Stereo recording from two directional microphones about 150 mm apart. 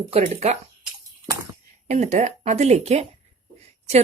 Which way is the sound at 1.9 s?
50° right (ahead or behind).